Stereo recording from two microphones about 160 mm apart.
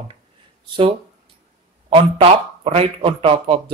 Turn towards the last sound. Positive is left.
turn(degrees=-35)  # may be behind; listen again after turning